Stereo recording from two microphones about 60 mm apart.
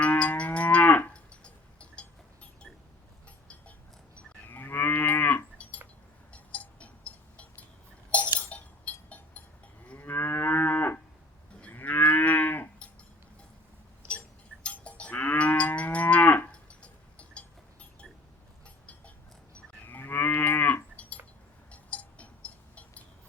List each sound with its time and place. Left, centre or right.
0.0 s moo: left
4.4 s moo: left
6.3 s cowbell: left
8.4 s chink: left
10.0 s moo: left
14.6 s livestock: left
19.8 s moo: left
21.7 s cowbell: left